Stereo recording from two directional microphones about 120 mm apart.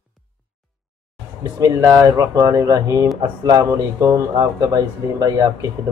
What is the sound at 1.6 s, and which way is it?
Speech, 25° right (ahead or behind).